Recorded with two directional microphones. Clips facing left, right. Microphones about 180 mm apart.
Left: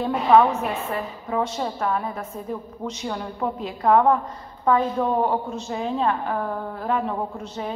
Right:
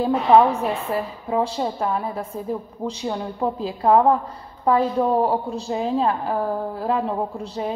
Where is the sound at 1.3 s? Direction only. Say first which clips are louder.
Right 3 dB; 30° right (ahead or behind).